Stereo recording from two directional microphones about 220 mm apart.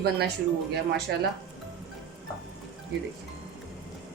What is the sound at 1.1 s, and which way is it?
Speech, 50° right (ahead or behind).